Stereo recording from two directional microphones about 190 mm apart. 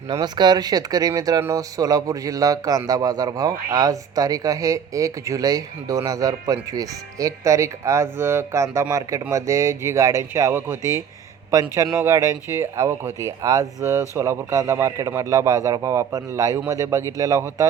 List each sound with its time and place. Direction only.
0.1 s speech: 20° right (ahead or behind)